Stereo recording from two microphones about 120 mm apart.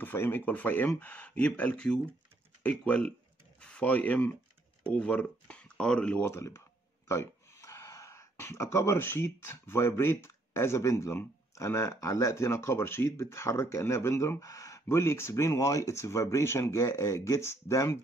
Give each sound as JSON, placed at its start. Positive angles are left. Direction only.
{"t": 0.0, "sound": "speech", "side_deg": 20}
{"t": 6.2, "sound": "speech", "side_deg": 25}